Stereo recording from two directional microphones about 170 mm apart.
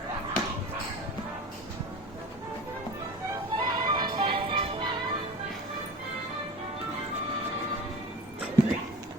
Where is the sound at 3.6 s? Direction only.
25° right (ahead or behind).